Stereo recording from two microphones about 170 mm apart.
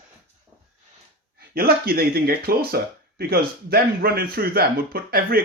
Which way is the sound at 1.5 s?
65° right (ahead or behind).